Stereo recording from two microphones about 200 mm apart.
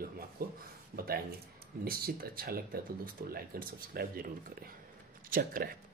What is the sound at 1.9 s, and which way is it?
Speech, 50° right (ahead or behind).